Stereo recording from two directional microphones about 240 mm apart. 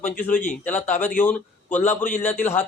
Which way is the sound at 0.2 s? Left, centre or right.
Centre.